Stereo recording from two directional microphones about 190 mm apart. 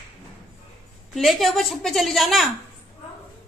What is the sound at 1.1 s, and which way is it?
A woman's voice, centre (ahead or behind).